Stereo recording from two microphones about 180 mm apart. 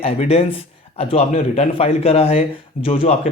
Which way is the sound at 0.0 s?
35° left (ahead or behind).